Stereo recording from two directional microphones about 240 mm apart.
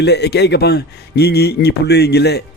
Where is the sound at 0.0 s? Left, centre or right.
Left.